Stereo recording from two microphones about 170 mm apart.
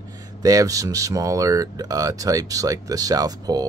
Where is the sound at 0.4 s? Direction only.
20° right (ahead or behind).